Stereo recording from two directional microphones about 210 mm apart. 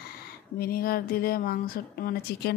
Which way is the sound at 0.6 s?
45° left (ahead or behind).